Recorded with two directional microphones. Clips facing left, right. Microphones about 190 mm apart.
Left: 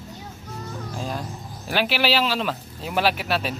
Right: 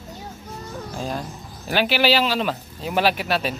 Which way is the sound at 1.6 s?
Centre (ahead or behind).